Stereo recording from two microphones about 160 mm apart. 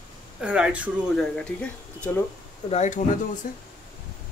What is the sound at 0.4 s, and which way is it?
Speech, 5° right (ahead or behind).